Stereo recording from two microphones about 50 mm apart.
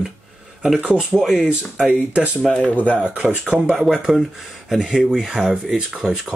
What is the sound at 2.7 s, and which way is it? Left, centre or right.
Speech, left.